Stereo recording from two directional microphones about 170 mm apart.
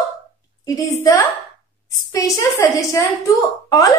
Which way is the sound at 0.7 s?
20° left (ahead or behind).